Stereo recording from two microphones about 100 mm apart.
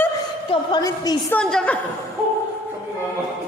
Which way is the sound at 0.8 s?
40° left (ahead or behind).